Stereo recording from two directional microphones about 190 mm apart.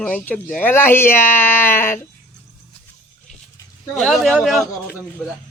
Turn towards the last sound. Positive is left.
turn(degrees=0)  # may be behind; listen again after turning